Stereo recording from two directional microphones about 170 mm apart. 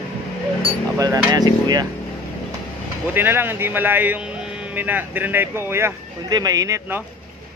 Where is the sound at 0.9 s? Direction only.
20° right (ahead or behind).